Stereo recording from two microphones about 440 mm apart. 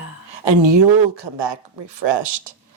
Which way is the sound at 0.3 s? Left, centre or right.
Right.